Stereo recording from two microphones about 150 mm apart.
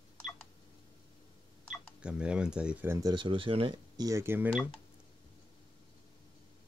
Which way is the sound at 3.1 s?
35° right (ahead or behind).